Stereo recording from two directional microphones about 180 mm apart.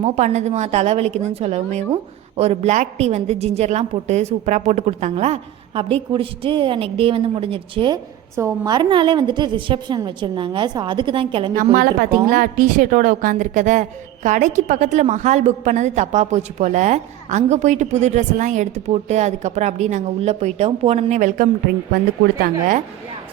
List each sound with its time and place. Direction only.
0.0 s a woman's voice: 40° right (ahead or behind)
11.5 s a woman's voice: 50° right (ahead or behind)